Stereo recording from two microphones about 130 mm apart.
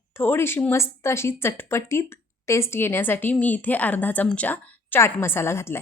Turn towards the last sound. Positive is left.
turn(degrees=20)  # may be behind; listen again after turning